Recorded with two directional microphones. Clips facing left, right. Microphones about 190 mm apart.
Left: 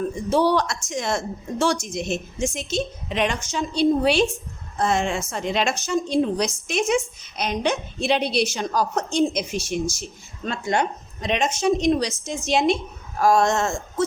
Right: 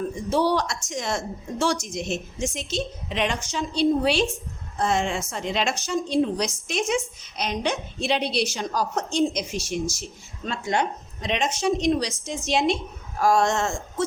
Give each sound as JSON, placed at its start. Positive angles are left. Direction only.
{"t": 0.3, "sound": "a woman's voice", "side_deg": 55}